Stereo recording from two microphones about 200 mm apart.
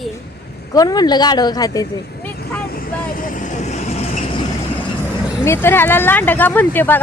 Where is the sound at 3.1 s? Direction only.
45° left (ahead or behind).